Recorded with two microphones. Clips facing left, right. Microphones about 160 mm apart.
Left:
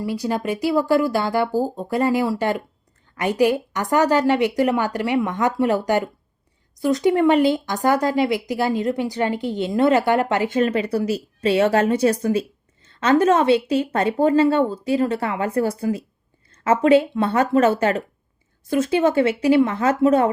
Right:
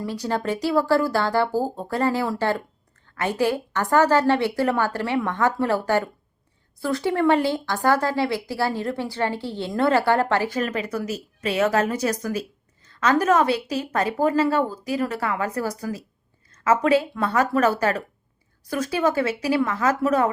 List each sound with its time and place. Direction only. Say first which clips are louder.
0.0 s a woman's voice: left 2 dB; 10° left (ahead or behind); by 20.3 s 30° left (ahead or behind)